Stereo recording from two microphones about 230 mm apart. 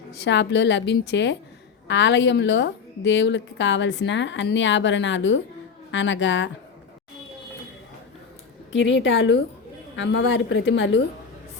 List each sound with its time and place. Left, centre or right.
0.1 s a woman's voice: left
8.7 s a woman's voice: left